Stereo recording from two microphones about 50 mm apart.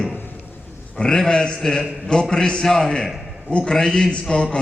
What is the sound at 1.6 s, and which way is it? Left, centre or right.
A man's voice, centre.